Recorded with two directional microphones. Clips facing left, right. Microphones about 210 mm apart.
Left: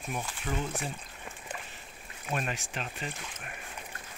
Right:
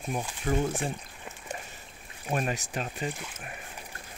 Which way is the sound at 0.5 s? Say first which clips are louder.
Right 7 dB; 55° right (ahead or behind).